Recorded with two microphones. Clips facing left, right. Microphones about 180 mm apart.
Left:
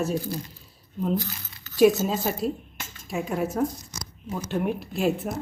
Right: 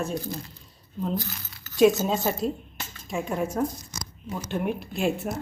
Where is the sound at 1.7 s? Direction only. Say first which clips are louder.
Left 1 dB; 5° left (ahead or behind).